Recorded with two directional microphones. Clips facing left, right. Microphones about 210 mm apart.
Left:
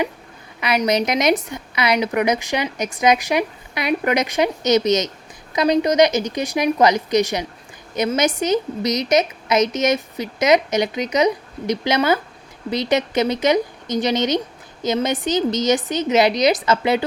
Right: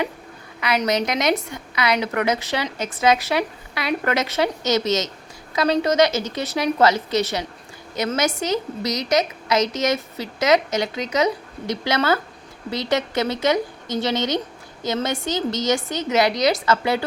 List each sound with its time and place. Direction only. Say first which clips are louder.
0.6 s a woman's voice: left 2 dB; 20° left (ahead or behind)